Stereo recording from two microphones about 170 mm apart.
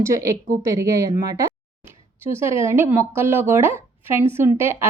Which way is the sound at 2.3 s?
15° right (ahead or behind).